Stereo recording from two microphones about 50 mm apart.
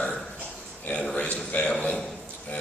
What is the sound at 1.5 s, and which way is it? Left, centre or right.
Speech, left.